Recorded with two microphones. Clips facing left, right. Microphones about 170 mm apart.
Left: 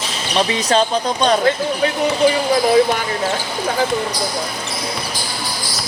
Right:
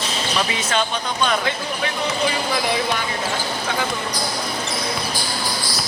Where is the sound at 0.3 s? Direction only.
35° left (ahead or behind).